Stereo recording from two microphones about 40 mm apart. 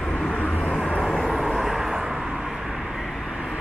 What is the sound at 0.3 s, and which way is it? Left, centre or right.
Vehicle, left.